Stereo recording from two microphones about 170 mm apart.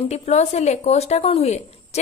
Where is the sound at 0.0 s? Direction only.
40° left (ahead or behind).